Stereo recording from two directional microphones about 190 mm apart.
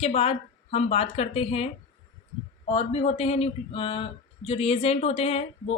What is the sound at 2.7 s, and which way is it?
Speech, 30° left (ahead or behind).